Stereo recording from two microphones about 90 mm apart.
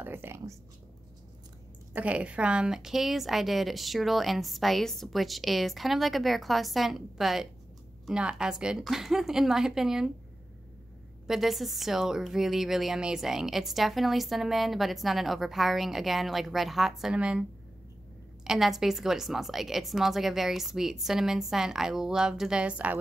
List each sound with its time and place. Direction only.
0.0 s speech: 25° right (ahead or behind)
2.0 s a woman's voice: 15° right (ahead or behind)
11.2 s a woman's voice: 5° right (ahead or behind)